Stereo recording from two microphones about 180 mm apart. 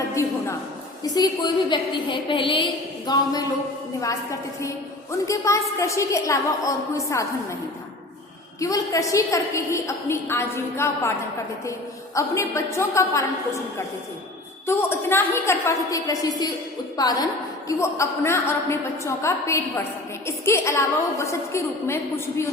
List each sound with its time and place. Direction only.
0.1 s a sound: 15° left (ahead or behind)
1.1 s a woman's voice: 20° left (ahead or behind)
8.6 s a woman's voice: 20° left (ahead or behind)
12.1 s a woman's voice: 15° left (ahead or behind)
14.7 s a woman's voice: 15° left (ahead or behind)